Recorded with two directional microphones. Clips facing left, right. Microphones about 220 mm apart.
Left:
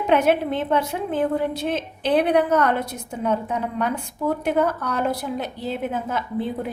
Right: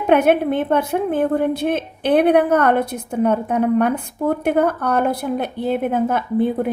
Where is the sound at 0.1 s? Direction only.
55° right (ahead or behind).